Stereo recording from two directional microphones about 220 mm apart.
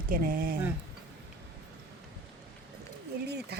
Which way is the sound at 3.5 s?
50° right (ahead or behind).